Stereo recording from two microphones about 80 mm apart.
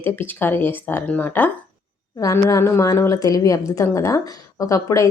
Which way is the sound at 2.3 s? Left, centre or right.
Left.